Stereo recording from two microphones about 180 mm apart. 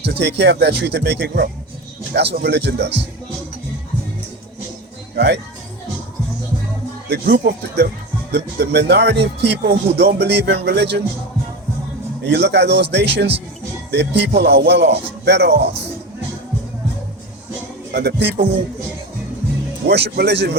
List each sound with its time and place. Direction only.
0.0 s a man's voice: 70° right (ahead or behind)
5.1 s a man's voice: 65° right (ahead or behind)
7.1 s a man's voice: 65° right (ahead or behind)
12.3 s a man's voice: 70° right (ahead or behind)
17.9 s a man's voice: 70° right (ahead or behind)
19.9 s a man's voice: 65° right (ahead or behind)